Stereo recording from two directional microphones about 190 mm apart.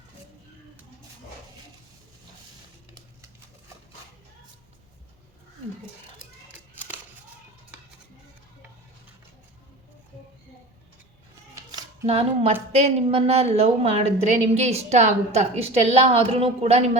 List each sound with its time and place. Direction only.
12.0 s a woman's voice: 30° right (ahead or behind)